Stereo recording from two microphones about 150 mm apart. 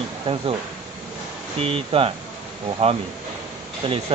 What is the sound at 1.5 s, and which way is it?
Speech, 40° right (ahead or behind).